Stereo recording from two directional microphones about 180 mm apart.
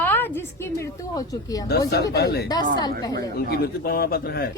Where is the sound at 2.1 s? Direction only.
60° left (ahead or behind).